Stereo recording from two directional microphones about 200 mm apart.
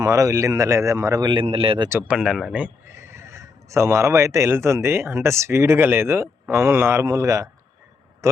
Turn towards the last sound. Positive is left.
turn(degrees=-15)  # may be behind; listen again after turning